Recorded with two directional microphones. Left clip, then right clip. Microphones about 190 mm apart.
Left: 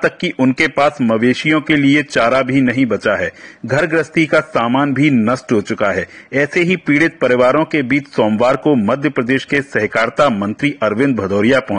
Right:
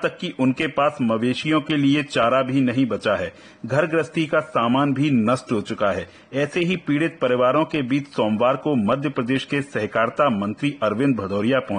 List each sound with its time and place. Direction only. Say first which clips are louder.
0.4 s a man's voice: left 7 dB; 20° left (ahead or behind)